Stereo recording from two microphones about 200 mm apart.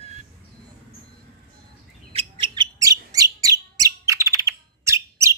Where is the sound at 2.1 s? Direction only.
25° right (ahead or behind).